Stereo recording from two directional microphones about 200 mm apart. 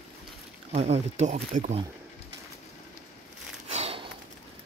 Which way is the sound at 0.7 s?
35° right (ahead or behind).